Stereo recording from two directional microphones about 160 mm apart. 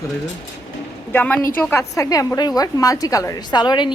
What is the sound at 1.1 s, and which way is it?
A woman's voice, 10° left (ahead or behind).